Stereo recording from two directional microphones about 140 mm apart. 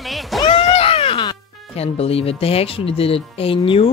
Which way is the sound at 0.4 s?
35° left (ahead or behind).